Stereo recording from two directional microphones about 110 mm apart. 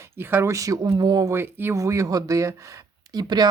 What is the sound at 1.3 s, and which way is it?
Speech, 20° right (ahead or behind).